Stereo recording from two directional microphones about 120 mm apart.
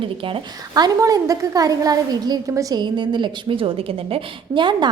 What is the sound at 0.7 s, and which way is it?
A woman's voice, 30° right (ahead or behind).